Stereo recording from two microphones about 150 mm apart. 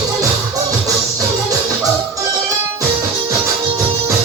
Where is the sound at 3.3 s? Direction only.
20° right (ahead or behind).